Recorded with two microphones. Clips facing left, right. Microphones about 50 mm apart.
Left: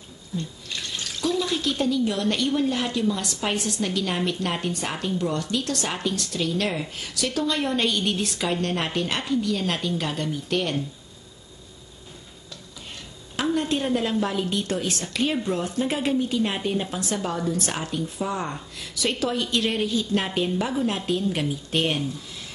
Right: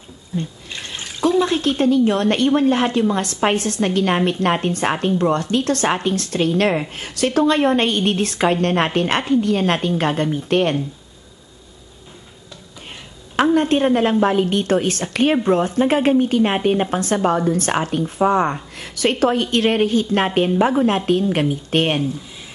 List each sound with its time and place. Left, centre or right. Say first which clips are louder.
0.4 s speech: right 5 dB; right
13.4 s a sound: right 9 dB; right
14.2 s a woman's voice: right 9 dB; right